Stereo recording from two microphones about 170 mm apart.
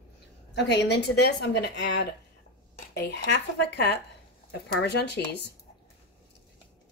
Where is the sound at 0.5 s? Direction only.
85° left.